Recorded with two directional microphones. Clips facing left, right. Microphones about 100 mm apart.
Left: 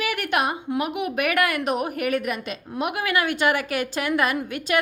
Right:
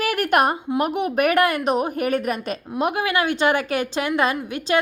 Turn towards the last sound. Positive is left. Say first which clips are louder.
# right 2 dB
turn(degrees=-25)  # may be behind; listen again after turning